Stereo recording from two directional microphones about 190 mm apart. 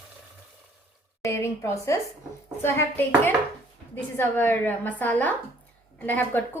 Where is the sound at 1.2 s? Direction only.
15° left (ahead or behind).